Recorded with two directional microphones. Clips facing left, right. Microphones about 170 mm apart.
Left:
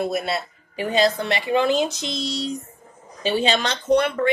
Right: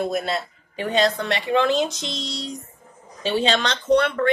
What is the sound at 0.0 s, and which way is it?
Speech, 5° left (ahead or behind).